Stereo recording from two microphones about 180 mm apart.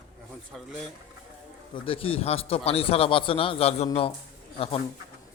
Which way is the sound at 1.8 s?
30° left (ahead or behind).